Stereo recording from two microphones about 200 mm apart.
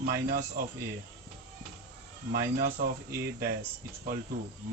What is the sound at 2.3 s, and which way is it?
Speech, 50° right (ahead or behind).